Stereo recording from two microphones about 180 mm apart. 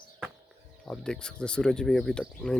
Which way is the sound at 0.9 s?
5° left (ahead or behind).